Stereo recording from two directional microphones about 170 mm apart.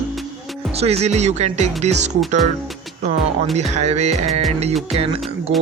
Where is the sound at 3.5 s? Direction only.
40° right (ahead or behind).